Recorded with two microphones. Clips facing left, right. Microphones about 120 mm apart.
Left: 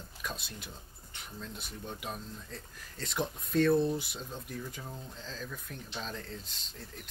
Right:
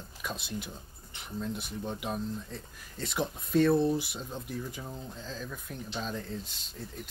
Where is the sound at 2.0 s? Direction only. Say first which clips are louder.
Right 7 dB; 5° right (ahead or behind).